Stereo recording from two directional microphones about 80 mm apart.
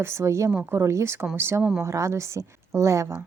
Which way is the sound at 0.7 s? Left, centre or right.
Right.